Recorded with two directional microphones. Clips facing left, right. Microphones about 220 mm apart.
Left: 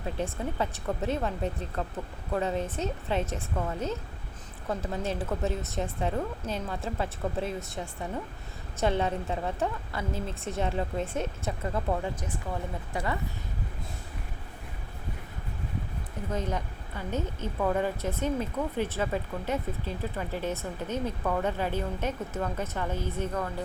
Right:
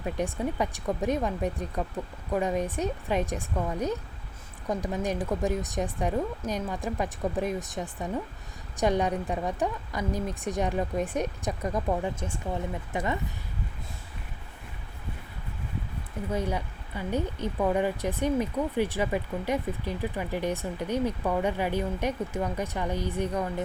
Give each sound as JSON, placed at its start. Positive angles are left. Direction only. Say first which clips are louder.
{"t": 0.0, "sound": "speech", "louder": "right 3 dB", "side_deg": -15}
{"t": 12.9, "sound": "speech", "louder": "right 2 dB", "side_deg": -20}
{"t": 16.3, "sound": "speech", "louder": "right 2 dB", "side_deg": -10}